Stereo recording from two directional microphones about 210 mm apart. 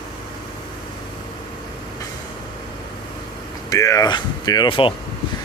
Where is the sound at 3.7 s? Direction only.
15° left (ahead or behind).